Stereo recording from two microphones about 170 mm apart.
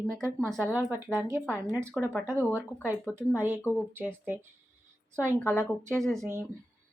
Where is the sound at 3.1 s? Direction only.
10° right (ahead or behind).